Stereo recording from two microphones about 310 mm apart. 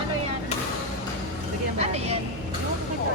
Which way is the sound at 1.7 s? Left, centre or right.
Centre.